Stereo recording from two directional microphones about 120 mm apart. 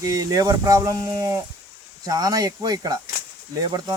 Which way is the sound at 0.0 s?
30° right (ahead or behind).